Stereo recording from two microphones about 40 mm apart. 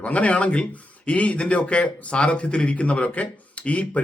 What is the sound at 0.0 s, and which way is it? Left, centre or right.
Speech, left.